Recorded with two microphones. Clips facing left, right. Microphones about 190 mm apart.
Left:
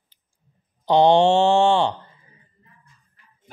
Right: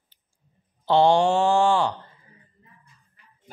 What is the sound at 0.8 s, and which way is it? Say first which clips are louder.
Mantra: left 3 dB; 20° left (ahead or behind).